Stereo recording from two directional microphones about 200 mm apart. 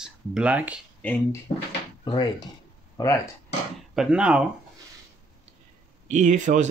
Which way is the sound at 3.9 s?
5° right (ahead or behind).